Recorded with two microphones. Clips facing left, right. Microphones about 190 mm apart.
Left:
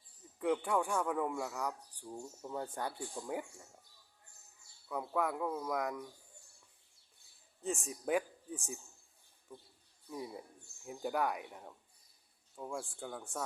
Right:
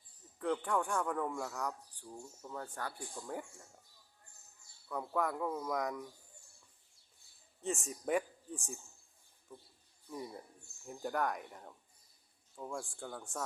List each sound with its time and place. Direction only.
0.3 s a man's voice: 10° left (ahead or behind)
2.1 s a man's voice: 20° left (ahead or behind)
4.9 s a man's voice: 5° left (ahead or behind)
7.6 s a man's voice: centre (ahead or behind)
10.1 s a man's voice: 5° left (ahead or behind)